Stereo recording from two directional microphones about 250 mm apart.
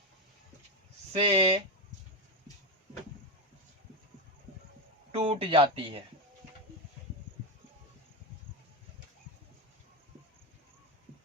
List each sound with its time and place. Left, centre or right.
1.1 s speech: right
5.1 s speech: right